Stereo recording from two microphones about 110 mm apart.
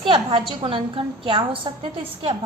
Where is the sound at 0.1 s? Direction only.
50° right (ahead or behind).